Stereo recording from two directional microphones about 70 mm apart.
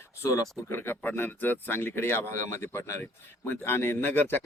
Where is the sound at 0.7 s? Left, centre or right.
Left.